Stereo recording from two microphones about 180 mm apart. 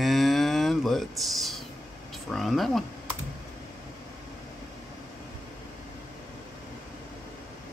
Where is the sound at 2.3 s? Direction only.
Centre (ahead or behind).